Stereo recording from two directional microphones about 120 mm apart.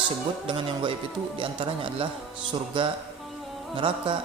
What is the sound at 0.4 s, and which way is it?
A man's voice, 45° right (ahead or behind).